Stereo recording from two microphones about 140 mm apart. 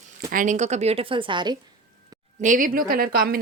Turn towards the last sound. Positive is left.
turn(degrees=-90)